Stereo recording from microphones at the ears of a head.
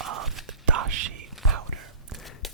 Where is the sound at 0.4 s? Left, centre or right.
Right.